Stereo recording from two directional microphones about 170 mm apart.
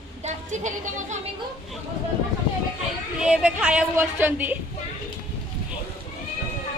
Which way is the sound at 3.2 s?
5° right (ahead or behind).